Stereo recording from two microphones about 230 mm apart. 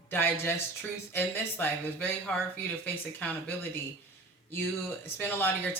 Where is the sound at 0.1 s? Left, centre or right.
Centre.